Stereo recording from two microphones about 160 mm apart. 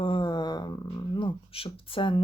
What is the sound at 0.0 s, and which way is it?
Speech, 30° left (ahead or behind).